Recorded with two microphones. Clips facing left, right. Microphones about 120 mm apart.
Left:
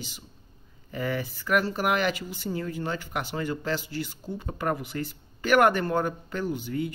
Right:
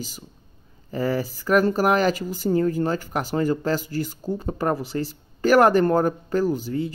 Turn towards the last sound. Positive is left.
turn(degrees=-35)  # may be behind; listen again after turning